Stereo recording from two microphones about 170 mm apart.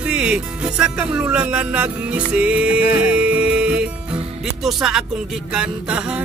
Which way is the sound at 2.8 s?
55° left (ahead or behind).